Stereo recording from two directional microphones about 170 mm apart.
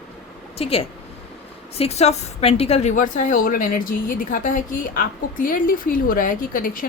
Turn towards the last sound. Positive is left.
turn(degrees=55)  # may be behind; listen again after turning